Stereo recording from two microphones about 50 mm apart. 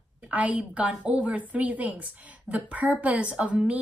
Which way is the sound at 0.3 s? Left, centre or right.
Right.